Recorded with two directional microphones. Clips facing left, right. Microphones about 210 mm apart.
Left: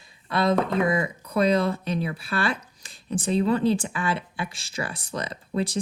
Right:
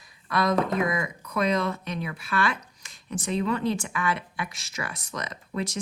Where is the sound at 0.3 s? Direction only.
30° left (ahead or behind).